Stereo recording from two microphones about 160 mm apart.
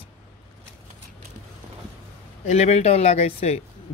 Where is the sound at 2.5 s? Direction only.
45° left (ahead or behind).